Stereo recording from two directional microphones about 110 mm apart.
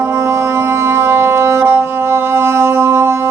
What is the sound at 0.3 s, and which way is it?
Music, 25° right (ahead or behind).